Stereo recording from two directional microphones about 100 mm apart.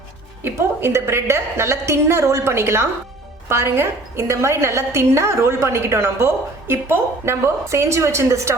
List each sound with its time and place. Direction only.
0.4 s a woman's voice: 25° right (ahead or behind)